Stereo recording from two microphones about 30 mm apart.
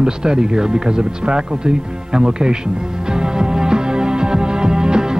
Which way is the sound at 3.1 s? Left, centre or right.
Right.